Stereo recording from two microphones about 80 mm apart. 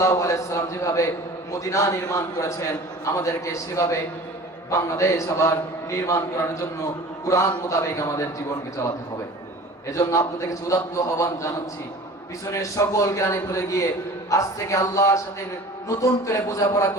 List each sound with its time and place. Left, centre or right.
0.0 s a man's voice: left
10.1 s a man's voice: left
12.5 s a man's voice: left